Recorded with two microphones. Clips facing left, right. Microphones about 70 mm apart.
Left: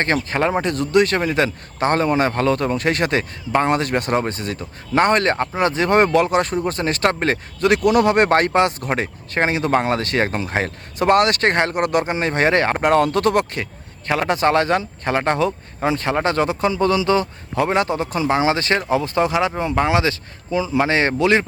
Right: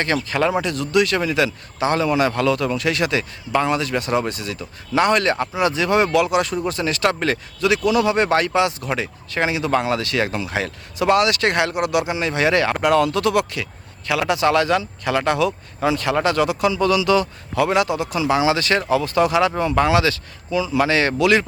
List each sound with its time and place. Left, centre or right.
0.0 s speech: left